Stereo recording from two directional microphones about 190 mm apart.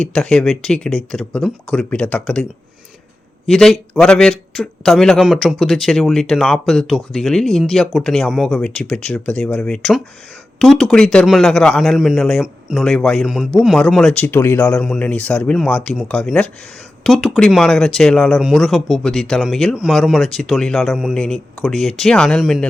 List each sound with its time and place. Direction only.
0.0 s a man's voice: centre (ahead or behind)